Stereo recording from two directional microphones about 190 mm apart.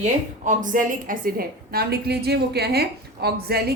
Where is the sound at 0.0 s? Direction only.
40° right (ahead or behind).